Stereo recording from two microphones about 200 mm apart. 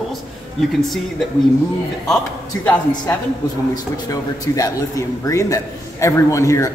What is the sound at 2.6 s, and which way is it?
A man's voice, 10° left (ahead or behind).